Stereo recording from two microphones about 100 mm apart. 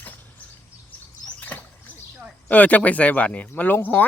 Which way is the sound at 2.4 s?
15° left (ahead or behind).